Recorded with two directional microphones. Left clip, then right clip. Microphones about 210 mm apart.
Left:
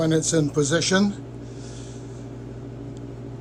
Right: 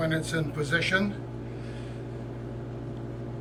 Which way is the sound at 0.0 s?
20° left (ahead or behind).